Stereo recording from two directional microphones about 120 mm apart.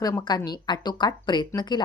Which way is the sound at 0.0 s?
35° left (ahead or behind).